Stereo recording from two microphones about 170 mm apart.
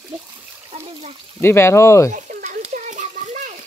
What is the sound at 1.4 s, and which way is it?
Speech, 15° left (ahead or behind).